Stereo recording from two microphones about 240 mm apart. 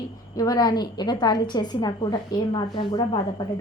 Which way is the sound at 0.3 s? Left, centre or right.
Centre.